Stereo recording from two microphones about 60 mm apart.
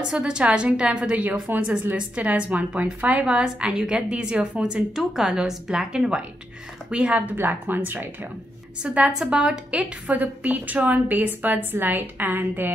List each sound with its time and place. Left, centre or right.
0.1 s a woman's voice: centre
4.9 s a woman's voice: centre
7.3 s speech: right
8.8 s a woman's voice: centre